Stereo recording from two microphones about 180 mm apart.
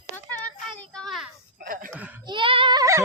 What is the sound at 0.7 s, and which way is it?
Child singing, 5° left (ahead or behind).